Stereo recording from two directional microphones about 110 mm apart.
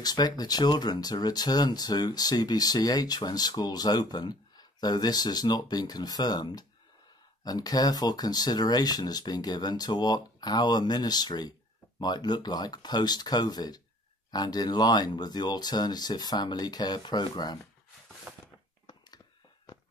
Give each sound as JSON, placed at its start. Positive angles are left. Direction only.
{"t": 0.0, "sound": "speech", "side_deg": 40}